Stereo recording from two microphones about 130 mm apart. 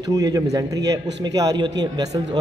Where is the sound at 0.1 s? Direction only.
25° right (ahead or behind).